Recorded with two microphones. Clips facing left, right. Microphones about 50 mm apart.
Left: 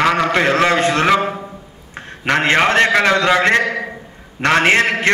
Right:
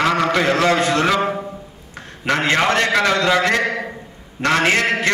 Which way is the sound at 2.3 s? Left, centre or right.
Left.